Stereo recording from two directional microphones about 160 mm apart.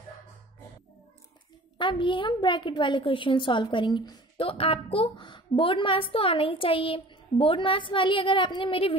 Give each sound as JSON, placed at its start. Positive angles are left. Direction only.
{"t": 1.8, "sound": "a woman's voice", "side_deg": 30}